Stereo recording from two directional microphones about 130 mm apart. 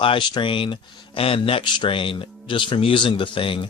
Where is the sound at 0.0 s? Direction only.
40° left (ahead or behind).